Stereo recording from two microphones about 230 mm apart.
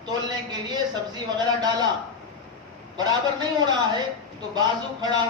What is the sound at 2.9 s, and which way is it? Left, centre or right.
Speech, centre.